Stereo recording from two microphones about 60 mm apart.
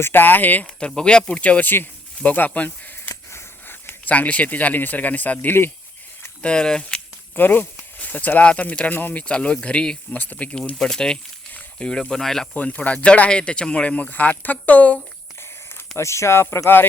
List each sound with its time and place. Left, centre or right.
0.0 s speech: left
0.6 s speech: centre; by 2.5 s left
2.6 s a sound: left
3.2 s speech: left
6.4 s speech: centre
7.3 s speech: left
9.2 s speech: centre
10.2 s speech: left
10.8 s speech: centre
11.5 s snake: left
12.0 s speech: centre
12.5 s speech: left
16.0 s speech: left